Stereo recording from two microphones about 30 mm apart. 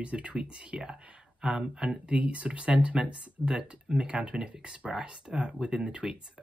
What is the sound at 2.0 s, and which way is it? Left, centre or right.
Speech, right.